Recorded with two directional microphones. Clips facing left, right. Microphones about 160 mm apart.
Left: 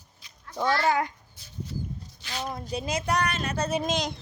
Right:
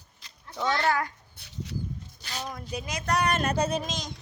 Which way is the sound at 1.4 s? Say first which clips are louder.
Even; 75° right (ahead or behind).